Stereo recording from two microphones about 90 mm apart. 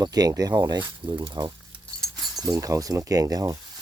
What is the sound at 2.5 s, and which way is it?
Speech, 40° right (ahead or behind).